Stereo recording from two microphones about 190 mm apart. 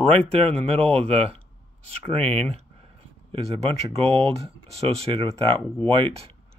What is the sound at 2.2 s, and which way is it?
Speech, 5° left (ahead or behind).